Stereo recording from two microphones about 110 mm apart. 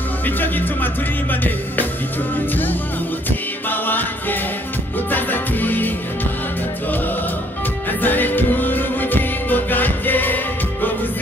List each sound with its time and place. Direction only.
0.2 s speech: 15° left (ahead or behind)
1.3 s music: 15° left (ahead or behind)
8.0 s music: 15° left (ahead or behind)